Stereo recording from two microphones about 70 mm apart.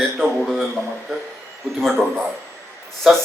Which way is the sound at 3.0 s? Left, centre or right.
Centre.